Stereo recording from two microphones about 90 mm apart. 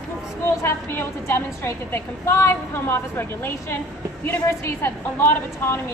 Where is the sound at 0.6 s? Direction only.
30° left (ahead or behind).